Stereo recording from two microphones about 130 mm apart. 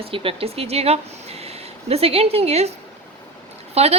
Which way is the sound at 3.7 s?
50° right (ahead or behind).